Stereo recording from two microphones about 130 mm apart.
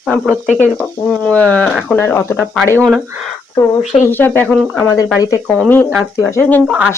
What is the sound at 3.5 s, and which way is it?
Speech, 30° left (ahead or behind).